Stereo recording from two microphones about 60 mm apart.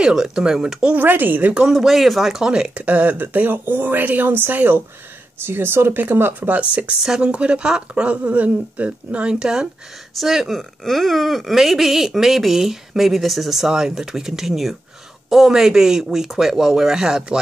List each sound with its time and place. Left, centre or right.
0.0 s speech: centre
0.9 s speech: right
1.7 s speech: centre
2.8 s speech: right
7.0 s speech: centre